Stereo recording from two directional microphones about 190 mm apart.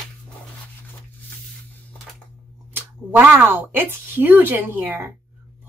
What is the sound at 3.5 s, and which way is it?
Speech, 10° right (ahead or behind).